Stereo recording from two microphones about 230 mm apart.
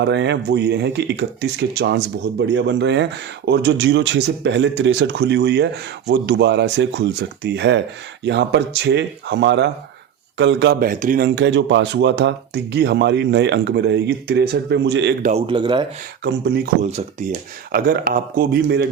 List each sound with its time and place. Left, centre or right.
0.0 s speech: right
15.2 s speech: right
16.8 s speech: right
17.7 s speech: right